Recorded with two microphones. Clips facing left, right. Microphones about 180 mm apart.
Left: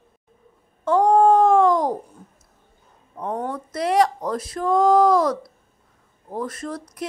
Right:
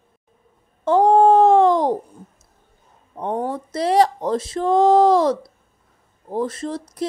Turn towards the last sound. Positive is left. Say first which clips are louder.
# right 5 dB
turn(degrees=-25)  # may be behind; listen again after turning